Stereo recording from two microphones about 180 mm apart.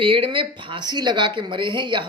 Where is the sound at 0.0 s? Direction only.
30° right (ahead or behind).